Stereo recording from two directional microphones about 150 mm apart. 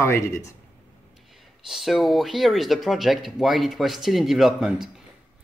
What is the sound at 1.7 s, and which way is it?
Speech, centre (ahead or behind).